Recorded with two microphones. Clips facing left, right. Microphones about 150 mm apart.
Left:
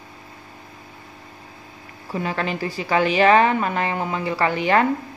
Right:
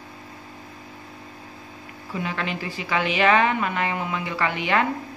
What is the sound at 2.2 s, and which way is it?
A woman's voice, 40° left (ahead or behind).